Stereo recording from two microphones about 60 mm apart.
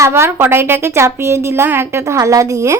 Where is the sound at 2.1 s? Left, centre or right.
Right.